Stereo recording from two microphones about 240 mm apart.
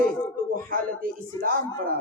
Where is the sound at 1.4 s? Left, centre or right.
Right.